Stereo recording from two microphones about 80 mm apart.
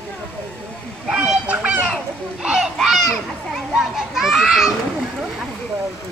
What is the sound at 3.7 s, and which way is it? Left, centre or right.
Children playing, centre.